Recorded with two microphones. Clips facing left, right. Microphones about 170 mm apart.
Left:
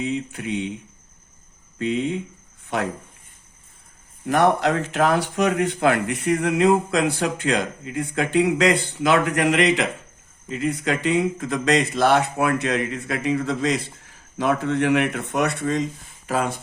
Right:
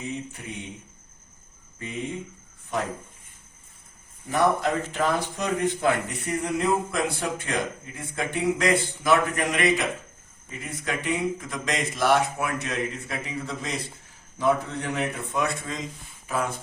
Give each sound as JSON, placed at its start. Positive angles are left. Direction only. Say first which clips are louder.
{"t": 0.0, "sound": "speech", "louder": "left 8 dB", "side_deg": 80}
{"t": 1.8, "sound": "speech", "louder": "left 9 dB", "side_deg": 80}
{"t": 4.3, "sound": "speech", "louder": "left 4 dB", "side_deg": 80}
{"t": 16.2, "sound": "speech", "louder": "left 4 dB", "side_deg": 85}